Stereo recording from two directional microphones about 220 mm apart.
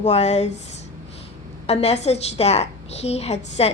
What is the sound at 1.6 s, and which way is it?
A woman's voice, 30° left (ahead or behind).